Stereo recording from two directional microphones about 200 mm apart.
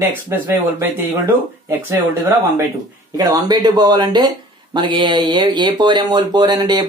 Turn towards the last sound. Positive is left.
turn(degrees=-20)  # may be behind; listen again after turning